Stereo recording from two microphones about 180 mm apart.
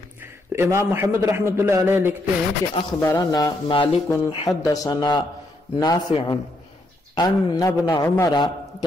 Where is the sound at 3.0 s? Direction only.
20° left (ahead or behind).